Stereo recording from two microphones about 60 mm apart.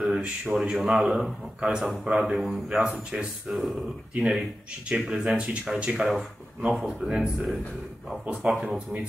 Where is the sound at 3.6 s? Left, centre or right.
Centre.